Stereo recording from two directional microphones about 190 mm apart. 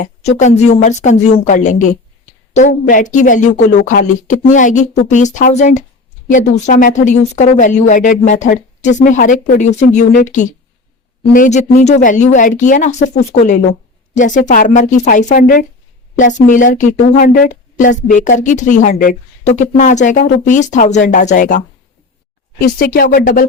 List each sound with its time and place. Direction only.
0.0 s speech: 35° left (ahead or behind)
22.6 s speech: 50° left (ahead or behind)